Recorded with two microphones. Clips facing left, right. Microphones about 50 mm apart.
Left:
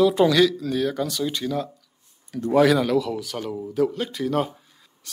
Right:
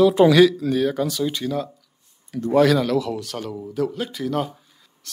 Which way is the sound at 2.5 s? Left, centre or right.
Centre.